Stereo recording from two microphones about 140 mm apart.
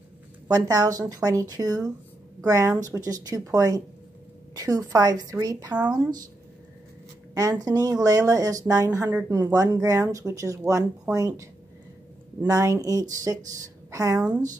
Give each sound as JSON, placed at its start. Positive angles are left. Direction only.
{"t": 0.5, "sound": "speech", "side_deg": -25}
{"t": 7.3, "sound": "speech", "side_deg": -25}
{"t": 9.5, "sound": "speech", "side_deg": -25}